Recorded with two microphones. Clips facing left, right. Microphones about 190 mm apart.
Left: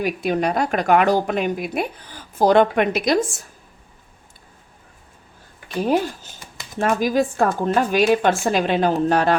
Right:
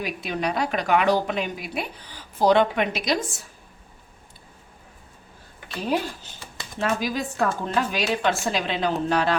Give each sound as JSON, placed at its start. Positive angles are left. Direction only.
{"t": 0.0, "sound": "a woman's voice", "side_deg": 45}
{"t": 5.8, "sound": "a woman's voice", "side_deg": 50}